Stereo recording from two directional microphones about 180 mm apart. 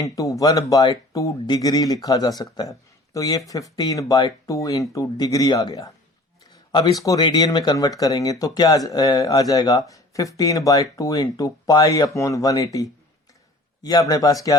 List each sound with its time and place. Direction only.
0.0 s speech: 20° left (ahead or behind)